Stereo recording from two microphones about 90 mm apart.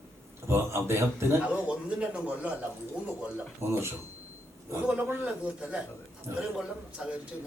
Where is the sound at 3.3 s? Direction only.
25° right (ahead or behind).